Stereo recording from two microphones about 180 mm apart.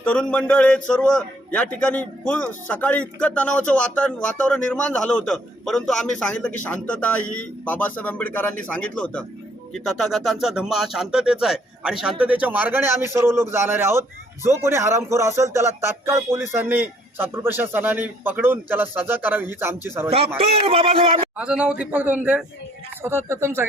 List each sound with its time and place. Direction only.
0.0 s a man's voice: 5° left (ahead or behind); by 20.1 s 10° right (ahead or behind)
20.1 s a man's voice: 30° right (ahead or behind)
21.3 s a man's voice: 5° right (ahead or behind)